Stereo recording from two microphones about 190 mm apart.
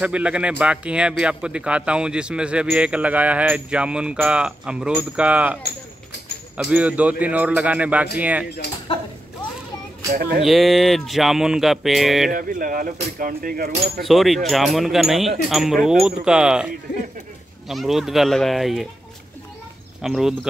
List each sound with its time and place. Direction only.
0.0 s speech: 5° right (ahead or behind)
5.6 s a sound: 60° left (ahead or behind)
6.5 s speech: 5° right (ahead or behind)
10.4 s speech: centre (ahead or behind)
12.3 s speech: 45° right (ahead or behind)
14.0 s speech: centre (ahead or behind)
20.0 s speech: centre (ahead or behind)